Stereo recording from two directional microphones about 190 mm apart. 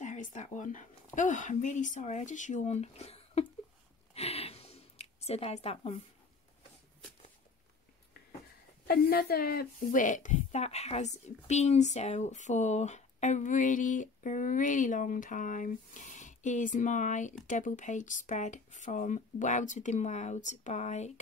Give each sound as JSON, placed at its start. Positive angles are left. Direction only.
{"t": 0.0, "sound": "a woman's voice", "side_deg": 40}
{"t": 4.1, "sound": "a sound", "side_deg": 30}
{"t": 8.8, "sound": "a woman's voice", "side_deg": 55}